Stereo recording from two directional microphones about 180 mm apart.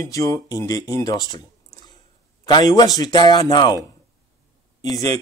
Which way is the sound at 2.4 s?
20° left (ahead or behind).